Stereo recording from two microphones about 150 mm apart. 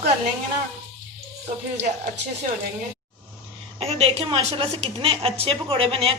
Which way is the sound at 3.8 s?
40° right (ahead or behind).